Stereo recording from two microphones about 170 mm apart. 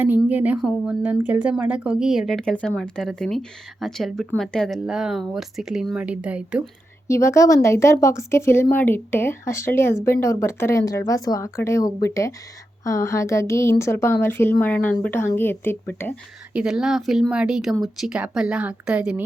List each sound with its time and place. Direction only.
0.0 s speech: 10° right (ahead or behind)
7.1 s speech: 15° left (ahead or behind)
16.5 s speech: 5° right (ahead or behind)